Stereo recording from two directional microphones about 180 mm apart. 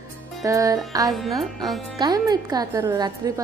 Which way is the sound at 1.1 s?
Centre (ahead or behind).